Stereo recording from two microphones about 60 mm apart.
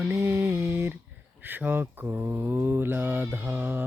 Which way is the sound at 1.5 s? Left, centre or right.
Right.